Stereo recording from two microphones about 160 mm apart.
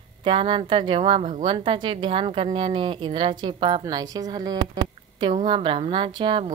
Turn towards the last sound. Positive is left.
turn(degrees=-30)  # may be behind; listen again after turning